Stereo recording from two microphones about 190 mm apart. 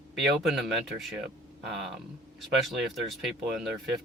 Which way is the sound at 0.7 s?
Centre (ahead or behind).